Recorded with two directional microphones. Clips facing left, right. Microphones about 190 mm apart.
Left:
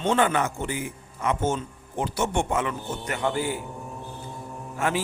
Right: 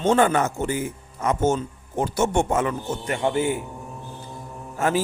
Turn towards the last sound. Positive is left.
turn(degrees=-40)  # may be behind; listen again after turning